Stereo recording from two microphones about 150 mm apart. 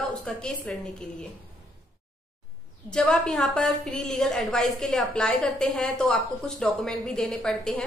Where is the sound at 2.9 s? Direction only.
5° left (ahead or behind).